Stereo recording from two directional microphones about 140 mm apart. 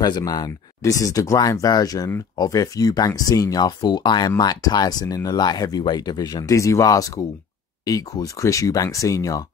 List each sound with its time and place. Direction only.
0.0 s speech: 30° left (ahead or behind)